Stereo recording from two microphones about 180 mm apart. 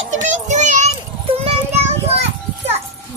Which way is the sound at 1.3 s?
35° right (ahead or behind).